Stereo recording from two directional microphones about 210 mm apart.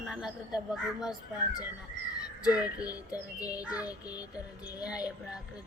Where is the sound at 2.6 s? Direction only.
15° left (ahead or behind).